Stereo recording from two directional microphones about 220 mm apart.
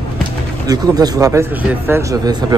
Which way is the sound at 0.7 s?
15° right (ahead or behind).